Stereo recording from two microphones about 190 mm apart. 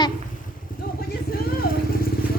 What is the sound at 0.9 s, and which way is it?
Vehicle, 50° left (ahead or behind).